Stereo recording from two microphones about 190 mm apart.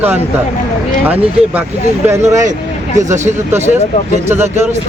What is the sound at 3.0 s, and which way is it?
Speech, 40° right (ahead or behind).